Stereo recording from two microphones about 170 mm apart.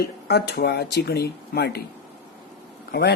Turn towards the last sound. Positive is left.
turn(degrees=75)  # may be behind; listen again after turning